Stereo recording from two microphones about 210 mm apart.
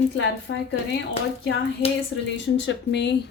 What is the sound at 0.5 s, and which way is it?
Speech, 65° left (ahead or behind).